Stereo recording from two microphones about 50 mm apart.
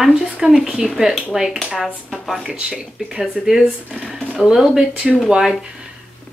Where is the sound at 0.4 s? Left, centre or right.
Centre.